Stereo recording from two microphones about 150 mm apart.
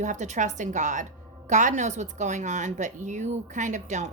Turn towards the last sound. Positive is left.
turn(degrees=-55)  # may be behind; listen again after turning